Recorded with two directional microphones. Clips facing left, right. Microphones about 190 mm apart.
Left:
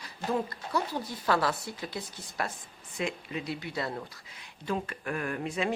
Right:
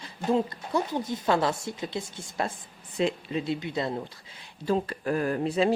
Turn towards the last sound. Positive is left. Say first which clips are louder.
# right 7 dB
turn(degrees=-30)  # may be behind; listen again after turning